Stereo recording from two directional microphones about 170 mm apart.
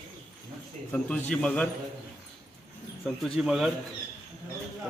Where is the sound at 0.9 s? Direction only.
5° left (ahead or behind).